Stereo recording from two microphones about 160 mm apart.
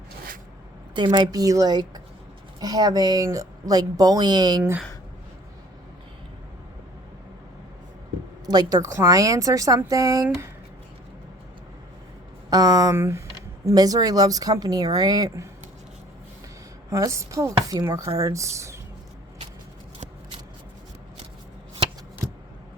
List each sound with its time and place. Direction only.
0.9 s speech: 30° right (ahead or behind)
8.4 s speech: 25° right (ahead or behind)
12.5 s speech: 20° right (ahead or behind)
16.9 s speech: 20° right (ahead or behind)